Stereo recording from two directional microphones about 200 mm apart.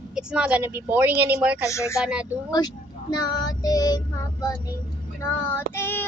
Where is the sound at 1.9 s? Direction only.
5° right (ahead or behind).